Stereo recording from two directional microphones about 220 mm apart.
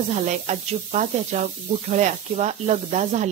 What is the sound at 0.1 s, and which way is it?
A woman's voice, 30° right (ahead or behind).